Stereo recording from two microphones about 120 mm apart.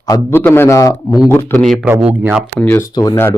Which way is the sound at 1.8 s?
15° right (ahead or behind).